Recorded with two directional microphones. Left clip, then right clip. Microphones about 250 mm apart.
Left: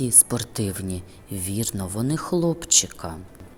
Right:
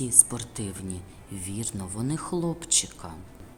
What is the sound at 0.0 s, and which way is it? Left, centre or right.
Speech, left.